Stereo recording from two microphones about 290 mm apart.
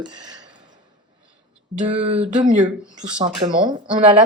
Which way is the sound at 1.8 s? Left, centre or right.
Right.